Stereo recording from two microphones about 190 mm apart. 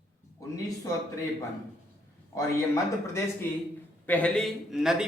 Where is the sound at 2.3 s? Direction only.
15° left (ahead or behind).